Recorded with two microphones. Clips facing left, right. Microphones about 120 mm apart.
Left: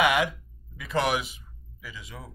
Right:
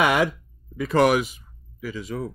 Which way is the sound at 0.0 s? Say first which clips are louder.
Right 3 dB; 40° right (ahead or behind).